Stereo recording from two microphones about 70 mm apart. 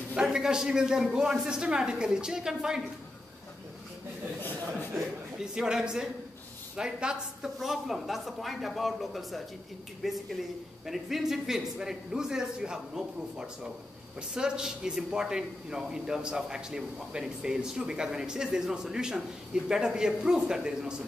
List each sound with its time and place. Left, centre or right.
0.2 s a man's voice: centre
4.9 s a man's voice: centre